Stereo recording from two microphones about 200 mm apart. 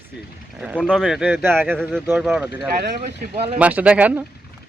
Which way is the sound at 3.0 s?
30° right (ahead or behind).